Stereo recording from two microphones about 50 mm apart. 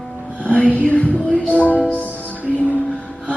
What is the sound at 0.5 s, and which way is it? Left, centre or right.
Music, left.